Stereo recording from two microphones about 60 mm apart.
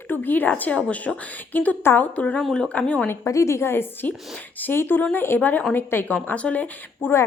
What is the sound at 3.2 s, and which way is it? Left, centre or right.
A woman's voice, left.